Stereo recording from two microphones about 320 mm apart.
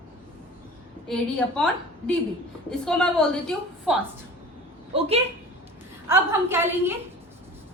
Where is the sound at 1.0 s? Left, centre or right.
Centre.